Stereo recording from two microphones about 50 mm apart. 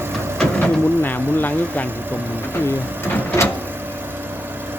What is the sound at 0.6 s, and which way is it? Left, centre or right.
Speech, left.